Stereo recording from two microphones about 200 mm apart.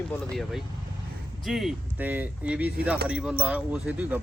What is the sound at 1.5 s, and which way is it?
Speech, centre (ahead or behind).